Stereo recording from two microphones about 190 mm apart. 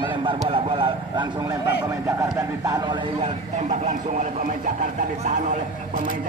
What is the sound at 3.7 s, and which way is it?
Speech, 40° right (ahead or behind).